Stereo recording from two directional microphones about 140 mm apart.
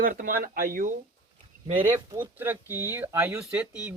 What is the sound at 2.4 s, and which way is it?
Speech, 15° right (ahead or behind).